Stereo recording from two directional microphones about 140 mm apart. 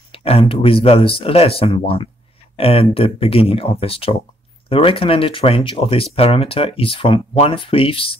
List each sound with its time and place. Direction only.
0.1 s speech: 45° left (ahead or behind)